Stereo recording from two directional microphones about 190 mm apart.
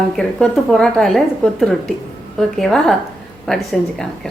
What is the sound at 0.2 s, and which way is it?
A woman's voice, centre (ahead or behind).